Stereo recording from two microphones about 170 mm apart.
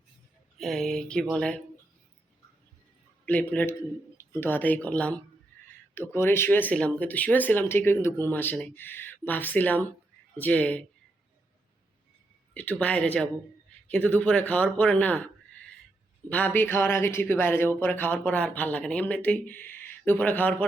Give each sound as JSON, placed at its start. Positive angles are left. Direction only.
{"t": 0.6, "sound": "speech", "side_deg": 0}
{"t": 3.2, "sound": "speech", "side_deg": 10}
{"t": 12.5, "sound": "speech", "side_deg": 10}
{"t": 16.3, "sound": "speech", "side_deg": 10}